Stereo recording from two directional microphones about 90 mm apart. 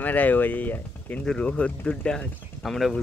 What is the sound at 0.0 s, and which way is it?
Speech, 20° left (ahead or behind).